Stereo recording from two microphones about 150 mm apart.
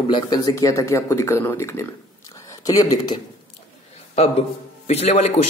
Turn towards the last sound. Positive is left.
turn(degrees=45)  # may be behind; listen again after turning